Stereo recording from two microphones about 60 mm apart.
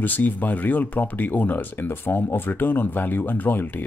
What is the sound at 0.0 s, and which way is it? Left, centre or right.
Speech, left.